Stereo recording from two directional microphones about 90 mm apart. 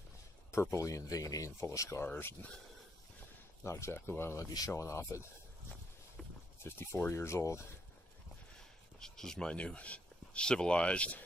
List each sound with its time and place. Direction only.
0.5 s speech: 30° left (ahead or behind)
3.6 s speech: 30° left (ahead or behind)
6.6 s speech: 30° left (ahead or behind)
9.0 s speech: 5° left (ahead or behind)